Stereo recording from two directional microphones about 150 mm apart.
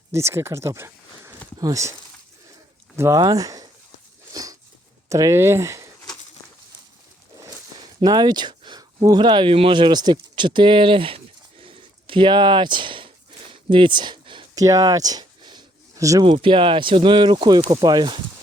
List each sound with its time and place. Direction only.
0.1 s speech: 20° right (ahead or behind)
2.9 s speech: 20° right (ahead or behind)
4.3 s a sound: 25° right (ahead or behind)
5.0 s speech: 20° right (ahead or behind)
7.4 s speech: 25° right (ahead or behind)
11.6 s a sound: 35° right (ahead or behind)
16.2 s speech: 35° right (ahead or behind)